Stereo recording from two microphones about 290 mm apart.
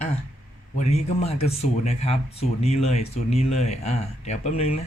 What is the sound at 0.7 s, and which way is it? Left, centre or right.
Speech, left.